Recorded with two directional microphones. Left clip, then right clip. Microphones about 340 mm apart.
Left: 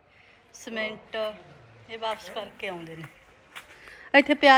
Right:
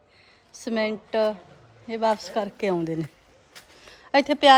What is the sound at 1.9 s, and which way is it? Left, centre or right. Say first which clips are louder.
A woman's voice: right 8 dB; right.